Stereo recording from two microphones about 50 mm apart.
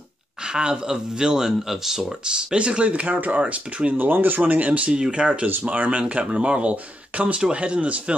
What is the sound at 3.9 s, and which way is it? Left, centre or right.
Speech, right.